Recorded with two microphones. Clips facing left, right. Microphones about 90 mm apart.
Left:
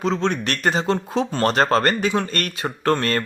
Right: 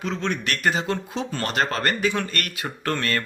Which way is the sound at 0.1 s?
30° left (ahead or behind).